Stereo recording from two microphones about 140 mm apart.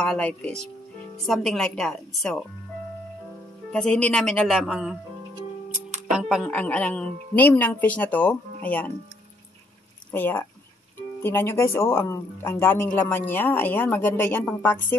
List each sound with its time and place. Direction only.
0.0 s speech: 5° left (ahead or behind)
3.7 s speech: 5° left (ahead or behind)
6.1 s speech: centre (ahead or behind)
6.5 s speech: 10° left (ahead or behind)
10.1 s speech: 15° left (ahead or behind)